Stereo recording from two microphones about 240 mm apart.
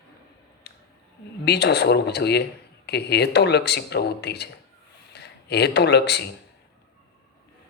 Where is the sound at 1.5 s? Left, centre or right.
Left.